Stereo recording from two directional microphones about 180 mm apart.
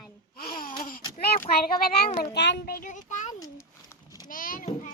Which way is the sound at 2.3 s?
70° left (ahead or behind).